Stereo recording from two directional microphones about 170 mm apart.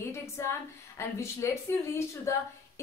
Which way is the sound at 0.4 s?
15° left (ahead or behind).